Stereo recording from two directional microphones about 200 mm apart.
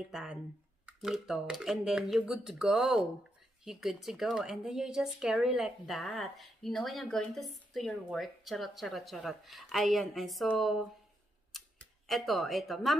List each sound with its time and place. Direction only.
0.1 s speech: 5° right (ahead or behind)
11.5 s camera: centre (ahead or behind)